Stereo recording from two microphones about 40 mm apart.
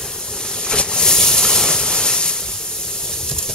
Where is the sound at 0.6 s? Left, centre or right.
Centre.